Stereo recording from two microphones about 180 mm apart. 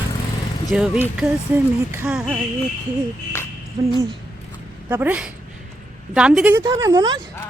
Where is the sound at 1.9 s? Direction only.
15° right (ahead or behind).